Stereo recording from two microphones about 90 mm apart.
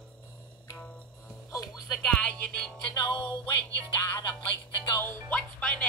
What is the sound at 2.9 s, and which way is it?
Music, 60° left (ahead or behind).